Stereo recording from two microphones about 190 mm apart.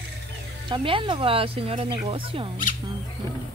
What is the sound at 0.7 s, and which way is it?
Speech, 25° right (ahead or behind).